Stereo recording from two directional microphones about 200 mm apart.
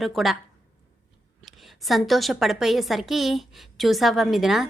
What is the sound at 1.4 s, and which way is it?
Speech, centre (ahead or behind).